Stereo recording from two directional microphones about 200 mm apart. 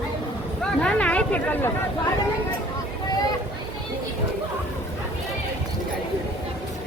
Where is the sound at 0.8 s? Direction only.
5° left (ahead or behind).